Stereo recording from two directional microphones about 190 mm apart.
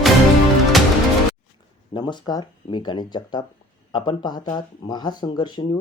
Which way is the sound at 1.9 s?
25° left (ahead or behind).